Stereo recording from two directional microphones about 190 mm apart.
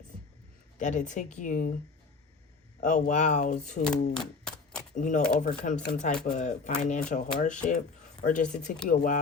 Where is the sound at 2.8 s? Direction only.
40° left (ahead or behind).